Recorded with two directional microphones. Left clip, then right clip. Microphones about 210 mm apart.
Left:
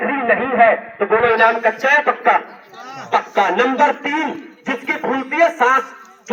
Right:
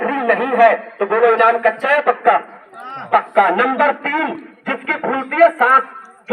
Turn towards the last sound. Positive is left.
turn(degrees=-40)  # may be behind; listen again after turning